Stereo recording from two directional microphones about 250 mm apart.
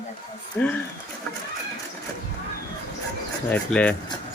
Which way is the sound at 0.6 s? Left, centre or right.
Centre.